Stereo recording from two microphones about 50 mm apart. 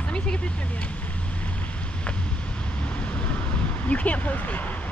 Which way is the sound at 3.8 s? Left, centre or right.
Left.